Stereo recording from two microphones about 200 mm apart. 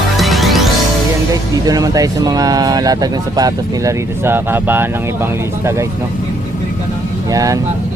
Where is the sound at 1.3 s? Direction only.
15° right (ahead or behind).